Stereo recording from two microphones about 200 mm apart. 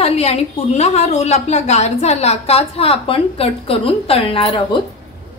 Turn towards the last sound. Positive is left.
turn(degrees=25)  # may be behind; listen again after turning